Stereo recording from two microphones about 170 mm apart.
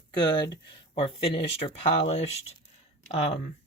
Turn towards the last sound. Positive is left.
turn(degrees=35)  # may be behind; listen again after turning